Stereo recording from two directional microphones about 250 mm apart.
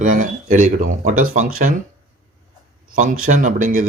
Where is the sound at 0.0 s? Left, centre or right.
Right.